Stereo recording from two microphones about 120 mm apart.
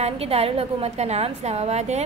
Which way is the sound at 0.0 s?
55° right (ahead or behind).